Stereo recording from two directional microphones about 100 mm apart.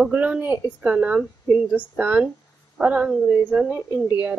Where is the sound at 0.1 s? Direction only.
10° right (ahead or behind).